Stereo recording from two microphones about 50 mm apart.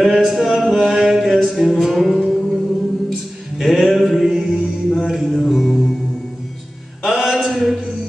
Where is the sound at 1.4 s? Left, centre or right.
Centre.